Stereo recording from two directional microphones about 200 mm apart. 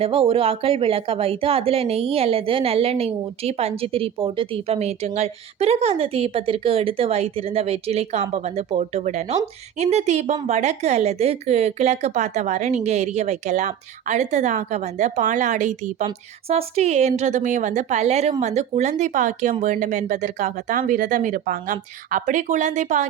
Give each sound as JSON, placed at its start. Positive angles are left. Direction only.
{"t": 0.0, "sound": "a woman's voice", "side_deg": -30}